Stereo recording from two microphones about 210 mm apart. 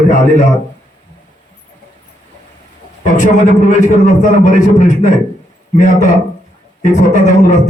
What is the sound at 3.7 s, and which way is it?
Speech, 35° left (ahead or behind).